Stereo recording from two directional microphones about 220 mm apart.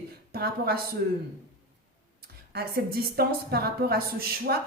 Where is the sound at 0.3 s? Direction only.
45° right (ahead or behind).